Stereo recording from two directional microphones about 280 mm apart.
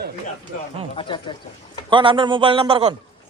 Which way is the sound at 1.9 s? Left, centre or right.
Centre.